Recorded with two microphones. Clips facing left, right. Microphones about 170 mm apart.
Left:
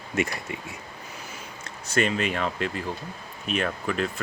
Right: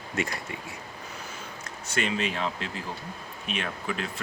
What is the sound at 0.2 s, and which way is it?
Speech, 20° left (ahead or behind).